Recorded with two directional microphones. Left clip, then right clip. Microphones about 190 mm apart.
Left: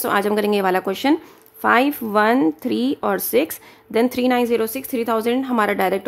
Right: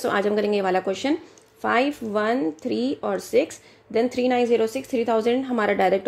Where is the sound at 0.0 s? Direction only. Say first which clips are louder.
Left 3 dB; 15° left (ahead or behind).